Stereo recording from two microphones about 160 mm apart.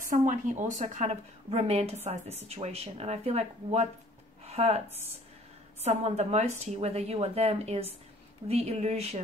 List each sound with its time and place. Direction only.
0.0 s a woman's voice: 55° right (ahead or behind)